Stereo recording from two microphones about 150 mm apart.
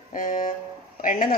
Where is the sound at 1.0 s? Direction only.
65° left (ahead or behind).